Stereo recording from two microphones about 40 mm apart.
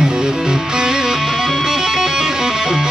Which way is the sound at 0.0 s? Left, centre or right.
Centre.